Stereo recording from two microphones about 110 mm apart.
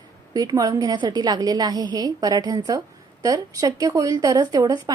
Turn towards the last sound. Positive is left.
turn(degrees=-35)  # may be behind; listen again after turning